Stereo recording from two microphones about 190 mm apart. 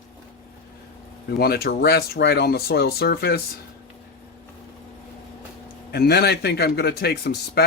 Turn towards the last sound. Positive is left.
turn(degrees=55)  # may be behind; listen again after turning